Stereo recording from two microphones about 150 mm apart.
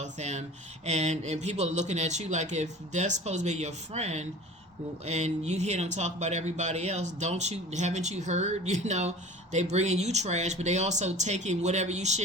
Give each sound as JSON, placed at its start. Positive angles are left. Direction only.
{"t": 0.0, "sound": "speech", "side_deg": -50}